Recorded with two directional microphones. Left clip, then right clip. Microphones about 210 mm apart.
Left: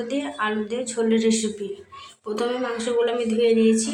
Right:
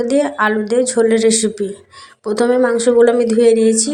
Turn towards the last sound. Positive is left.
turn(degrees=-30)  # may be behind; listen again after turning